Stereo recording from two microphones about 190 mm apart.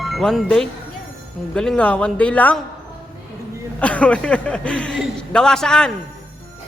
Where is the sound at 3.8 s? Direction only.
5° left (ahead or behind).